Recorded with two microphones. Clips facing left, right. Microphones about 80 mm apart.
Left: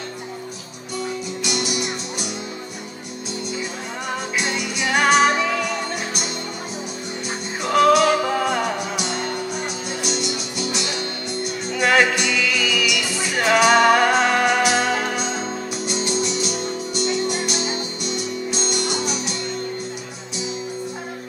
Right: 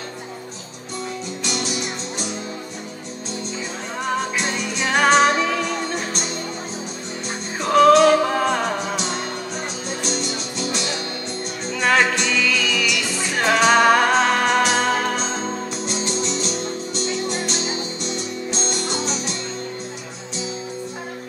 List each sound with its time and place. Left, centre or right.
1.4 s music: centre
4.4 s music: centre
7.6 s music: centre
11.7 s music: centre